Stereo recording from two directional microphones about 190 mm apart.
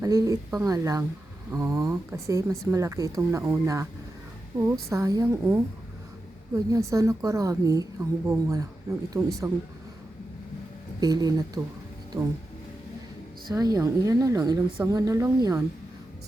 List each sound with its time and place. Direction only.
0.0 s a woman's voice: 15° right (ahead or behind)
11.0 s speech: 20° right (ahead or behind)
13.5 s a woman's voice: 20° right (ahead or behind)